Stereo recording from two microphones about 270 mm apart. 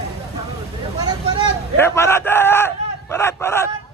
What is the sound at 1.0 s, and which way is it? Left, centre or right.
Vehicle, centre.